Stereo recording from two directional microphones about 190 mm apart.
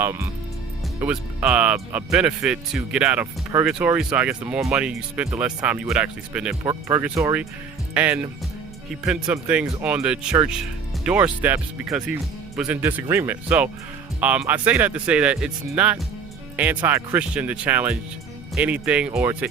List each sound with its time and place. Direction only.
0.0 s speech: 10° right (ahead or behind)
6.7 s speech: 15° right (ahead or behind)